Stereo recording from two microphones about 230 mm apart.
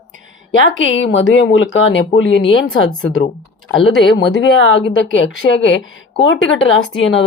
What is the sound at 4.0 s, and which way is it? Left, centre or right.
Speech, left.